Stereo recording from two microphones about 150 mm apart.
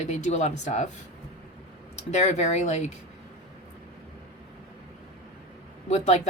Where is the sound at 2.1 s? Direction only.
50° left (ahead or behind).